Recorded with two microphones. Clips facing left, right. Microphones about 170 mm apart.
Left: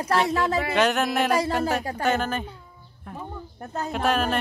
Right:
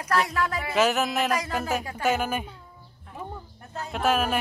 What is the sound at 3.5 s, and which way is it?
Speech, 40° left (ahead or behind).